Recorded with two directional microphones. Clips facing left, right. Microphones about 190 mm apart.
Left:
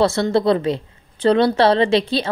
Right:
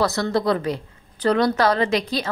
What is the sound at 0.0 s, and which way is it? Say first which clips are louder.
A woman's voice: left 4 dB; 25° left (ahead or behind).